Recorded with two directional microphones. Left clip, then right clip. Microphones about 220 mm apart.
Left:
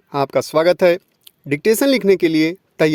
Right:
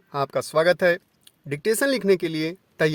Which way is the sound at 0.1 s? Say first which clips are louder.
Left 7 dB; 35° left (ahead or behind).